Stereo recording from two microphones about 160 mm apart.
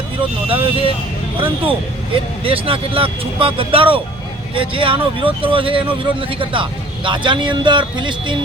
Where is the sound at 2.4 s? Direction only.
35° right (ahead or behind).